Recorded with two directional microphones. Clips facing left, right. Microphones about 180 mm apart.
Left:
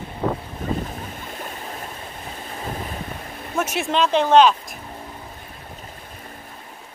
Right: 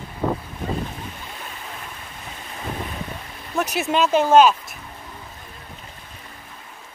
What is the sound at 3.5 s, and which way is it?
Speech, centre (ahead or behind).